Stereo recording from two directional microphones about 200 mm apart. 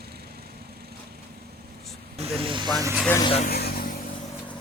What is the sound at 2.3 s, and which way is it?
Speech, 25° right (ahead or behind).